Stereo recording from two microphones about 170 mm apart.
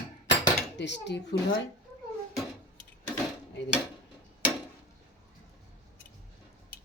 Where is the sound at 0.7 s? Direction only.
90° left.